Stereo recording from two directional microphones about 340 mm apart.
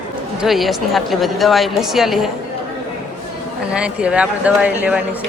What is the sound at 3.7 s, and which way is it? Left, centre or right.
Speech, centre.